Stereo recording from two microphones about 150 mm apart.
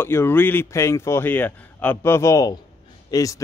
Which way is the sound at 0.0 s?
15° left (ahead or behind).